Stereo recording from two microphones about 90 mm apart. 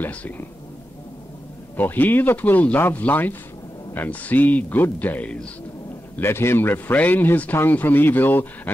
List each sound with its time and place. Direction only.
0.0 s speech: 20° left (ahead or behind)
1.8 s speech: 20° left (ahead or behind)
6.1 s speech: 25° left (ahead or behind)